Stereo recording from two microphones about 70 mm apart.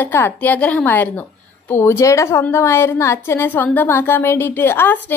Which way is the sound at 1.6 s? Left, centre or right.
Left.